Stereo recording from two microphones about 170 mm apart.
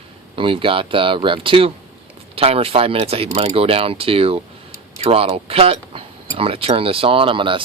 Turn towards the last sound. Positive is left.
turn(degrees=-30)  # may be behind; listen again after turning